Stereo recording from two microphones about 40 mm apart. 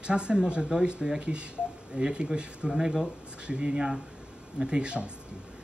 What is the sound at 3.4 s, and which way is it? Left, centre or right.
Speech, right.